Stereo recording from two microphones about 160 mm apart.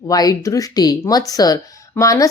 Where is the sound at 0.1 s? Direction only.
25° left (ahead or behind).